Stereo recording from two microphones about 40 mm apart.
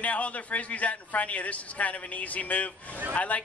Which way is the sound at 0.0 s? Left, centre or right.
Left.